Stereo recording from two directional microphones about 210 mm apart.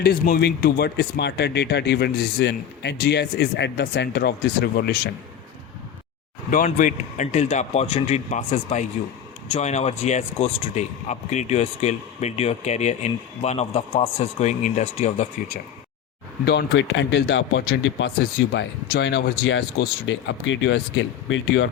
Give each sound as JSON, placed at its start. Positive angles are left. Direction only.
{"t": 0.0, "sound": "speech", "side_deg": 50}
{"t": 6.5, "sound": "speech", "side_deg": 40}
{"t": 16.5, "sound": "speech", "side_deg": 55}